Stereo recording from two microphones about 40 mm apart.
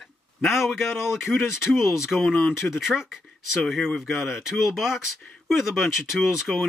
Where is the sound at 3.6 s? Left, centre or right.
Centre.